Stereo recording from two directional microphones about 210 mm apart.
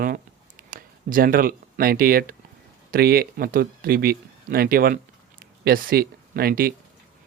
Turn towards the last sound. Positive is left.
turn(degrees=-45)  # may be behind; listen again after turning